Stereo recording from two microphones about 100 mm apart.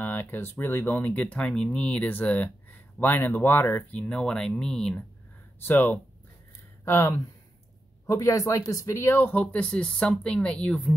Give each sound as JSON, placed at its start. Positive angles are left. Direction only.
{"t": 0.0, "sound": "speech", "side_deg": 20}
{"t": 5.6, "sound": "speech", "side_deg": 20}